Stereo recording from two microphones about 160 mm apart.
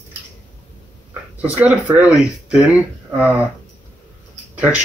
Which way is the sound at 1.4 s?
10° right (ahead or behind).